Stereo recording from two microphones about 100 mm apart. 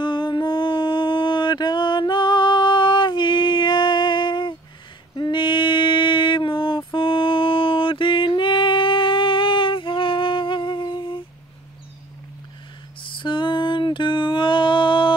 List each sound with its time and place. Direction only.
0.0 s mantra: 45° left (ahead or behind)
5.1 s a sound: 50° left (ahead or behind)
6.9 s mantra: 55° left (ahead or behind)
13.0 s music: 55° left (ahead or behind)